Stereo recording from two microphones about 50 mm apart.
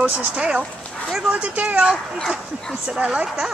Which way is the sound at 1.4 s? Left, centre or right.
Right.